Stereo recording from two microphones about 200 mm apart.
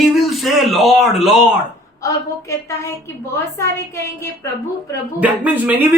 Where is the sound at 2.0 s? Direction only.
15° left (ahead or behind).